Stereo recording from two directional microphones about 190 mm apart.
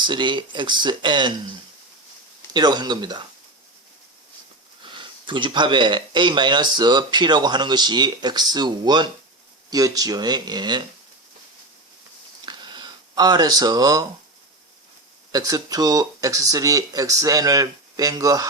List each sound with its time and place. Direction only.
0.0 s speech: 25° right (ahead or behind)
2.5 s speech: 20° right (ahead or behind)
4.8 s speech: 25° right (ahead or behind)
12.5 s a sound: 25° right (ahead or behind)
15.3 s speech: 20° right (ahead or behind)